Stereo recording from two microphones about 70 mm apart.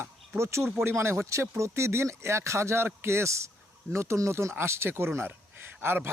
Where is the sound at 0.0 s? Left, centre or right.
Right.